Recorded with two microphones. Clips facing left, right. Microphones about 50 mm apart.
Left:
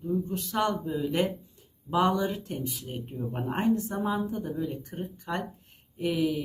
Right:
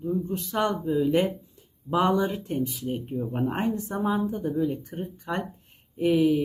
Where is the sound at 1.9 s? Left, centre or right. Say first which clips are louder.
Right 2 dB; centre.